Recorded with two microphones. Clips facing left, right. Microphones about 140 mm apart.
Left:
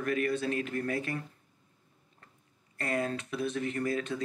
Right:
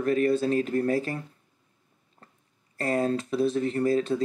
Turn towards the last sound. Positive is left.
turn(degrees=-30)  # may be behind; listen again after turning